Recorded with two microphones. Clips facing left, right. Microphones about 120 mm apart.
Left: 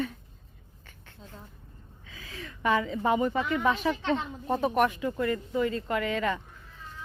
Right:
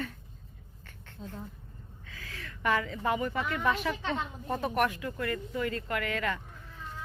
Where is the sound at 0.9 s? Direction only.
10° left (ahead or behind).